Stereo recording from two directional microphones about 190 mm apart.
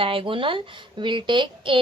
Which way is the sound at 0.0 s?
30° right (ahead or behind).